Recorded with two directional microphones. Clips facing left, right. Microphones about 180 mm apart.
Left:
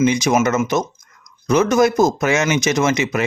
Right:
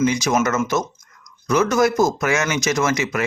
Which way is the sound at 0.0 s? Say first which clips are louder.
Left 3 dB; 20° left (ahead or behind).